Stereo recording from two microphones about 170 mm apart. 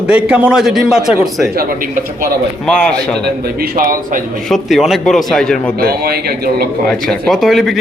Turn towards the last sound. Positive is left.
turn(degrees=0)  # may be behind; listen again after turning